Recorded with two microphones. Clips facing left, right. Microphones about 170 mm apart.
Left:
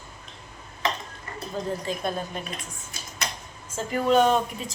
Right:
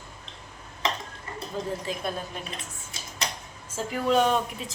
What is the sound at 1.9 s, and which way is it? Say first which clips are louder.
Speech: left 2 dB; 5° right (ahead or behind).